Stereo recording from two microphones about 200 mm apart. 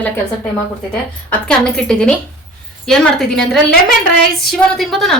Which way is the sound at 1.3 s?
5° left (ahead or behind).